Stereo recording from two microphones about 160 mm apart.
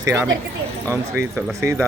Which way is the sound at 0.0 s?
20° right (ahead or behind).